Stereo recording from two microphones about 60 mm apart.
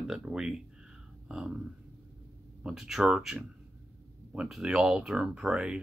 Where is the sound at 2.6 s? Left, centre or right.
Centre.